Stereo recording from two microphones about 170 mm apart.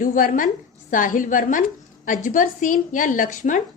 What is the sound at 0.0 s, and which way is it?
A woman's voice, 55° left (ahead or behind).